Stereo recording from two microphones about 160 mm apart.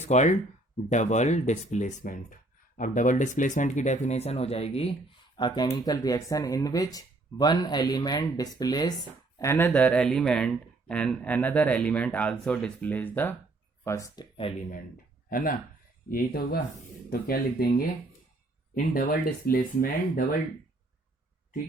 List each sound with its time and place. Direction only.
0.0 s speech: 45° left (ahead or behind); by 9.0 s 25° left (ahead or behind)
9.4 s speech: 15° left (ahead or behind)
14.5 s speech: 35° left (ahead or behind)
15.3 s speech: 60° left (ahead or behind)
16.0 s speech: 70° left (ahead or behind)